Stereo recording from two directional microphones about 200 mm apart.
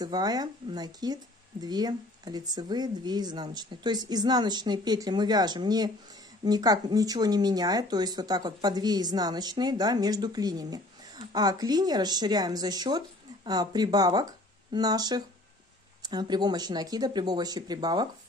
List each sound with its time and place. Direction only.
0.0 s speech: 20° right (ahead or behind)